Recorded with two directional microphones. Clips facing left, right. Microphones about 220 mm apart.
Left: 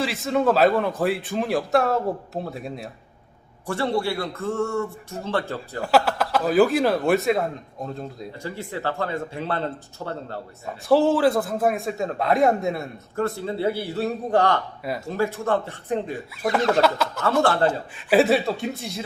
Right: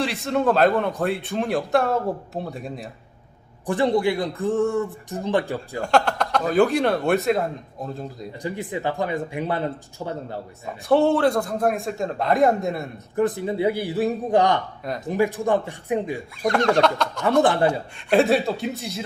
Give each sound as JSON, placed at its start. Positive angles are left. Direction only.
{"t": 0.0, "sound": "a man's voice", "side_deg": 0}
{"t": 3.7, "sound": "speech", "side_deg": -15}
{"t": 5.8, "sound": "a man's voice", "side_deg": 5}
{"t": 8.4, "sound": "speech", "side_deg": -15}
{"t": 10.8, "sound": "a man's voice", "side_deg": 0}
{"t": 13.1, "sound": "speech", "side_deg": -15}
{"t": 16.3, "sound": "a man's voice", "side_deg": 5}
{"t": 17.4, "sound": "speech", "side_deg": -15}
{"t": 17.7, "sound": "a man's voice", "side_deg": 5}